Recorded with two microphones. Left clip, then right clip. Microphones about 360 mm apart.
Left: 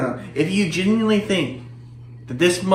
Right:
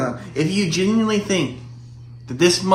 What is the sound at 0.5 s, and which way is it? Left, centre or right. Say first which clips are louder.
Speech: right 1 dB; centre.